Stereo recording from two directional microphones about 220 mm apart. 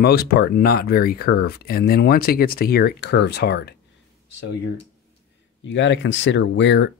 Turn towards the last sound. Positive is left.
turn(degrees=55)  # may be behind; listen again after turning